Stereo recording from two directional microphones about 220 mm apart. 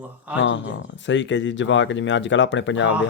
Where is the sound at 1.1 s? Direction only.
55° left (ahead or behind).